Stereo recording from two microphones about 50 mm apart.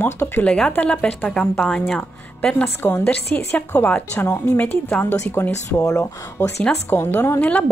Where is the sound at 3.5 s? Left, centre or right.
Left.